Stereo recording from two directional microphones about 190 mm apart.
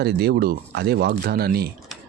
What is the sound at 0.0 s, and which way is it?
Speech, 55° right (ahead or behind).